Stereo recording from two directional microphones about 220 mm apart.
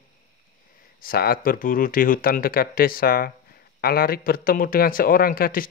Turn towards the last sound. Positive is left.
turn(degrees=40)  # may be behind; listen again after turning